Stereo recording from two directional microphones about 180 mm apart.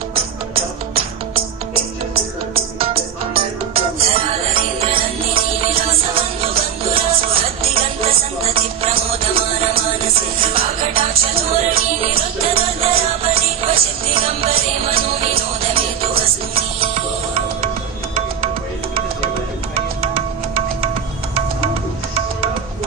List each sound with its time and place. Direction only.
3.3 s music: 30° right (ahead or behind)
8.0 s music: 30° right (ahead or behind)
10.4 s music: 30° right (ahead or behind)
20.0 s music: 30° right (ahead or behind)